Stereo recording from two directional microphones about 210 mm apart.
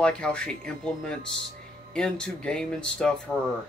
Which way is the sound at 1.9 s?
5° left (ahead or behind).